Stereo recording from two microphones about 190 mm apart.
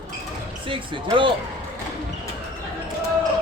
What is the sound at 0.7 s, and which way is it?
Speech, 25° right (ahead or behind).